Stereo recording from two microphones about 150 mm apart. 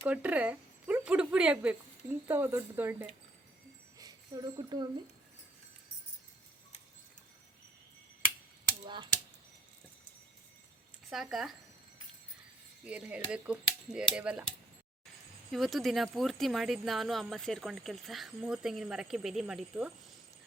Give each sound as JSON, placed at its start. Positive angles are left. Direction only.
{"t": 0.0, "sound": "speech", "side_deg": -10}
{"t": 3.9, "sound": "a sound", "side_deg": -25}
{"t": 11.1, "sound": "speech", "side_deg": 0}
{"t": 12.8, "sound": "speech", "side_deg": -5}
{"t": 15.5, "sound": "speech", "side_deg": 0}